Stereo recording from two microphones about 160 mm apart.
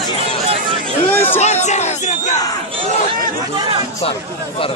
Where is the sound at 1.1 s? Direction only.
15° left (ahead or behind).